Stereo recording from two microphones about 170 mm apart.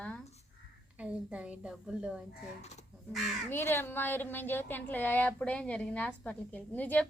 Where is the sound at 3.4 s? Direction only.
15° left (ahead or behind).